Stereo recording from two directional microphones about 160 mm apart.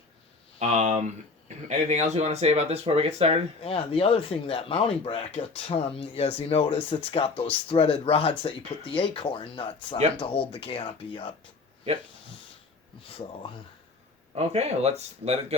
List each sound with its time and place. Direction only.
0.6 s speech: 45° right (ahead or behind)
3.6 s speech: 35° left (ahead or behind)
13.0 s speech: 35° left (ahead or behind)
14.3 s speech: 40° right (ahead or behind)